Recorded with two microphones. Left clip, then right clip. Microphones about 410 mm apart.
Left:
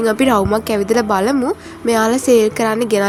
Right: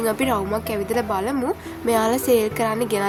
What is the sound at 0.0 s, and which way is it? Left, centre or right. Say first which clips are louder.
Speech: left 7 dB; right.